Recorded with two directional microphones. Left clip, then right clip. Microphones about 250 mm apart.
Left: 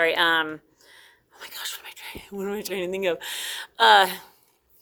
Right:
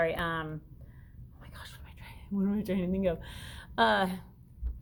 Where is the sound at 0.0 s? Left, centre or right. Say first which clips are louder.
Left 10 dB; left.